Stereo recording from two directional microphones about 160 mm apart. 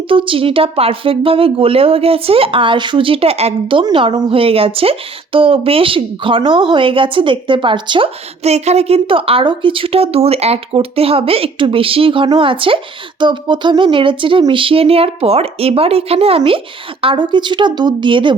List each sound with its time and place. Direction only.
0.1 s speech: 35° right (ahead or behind)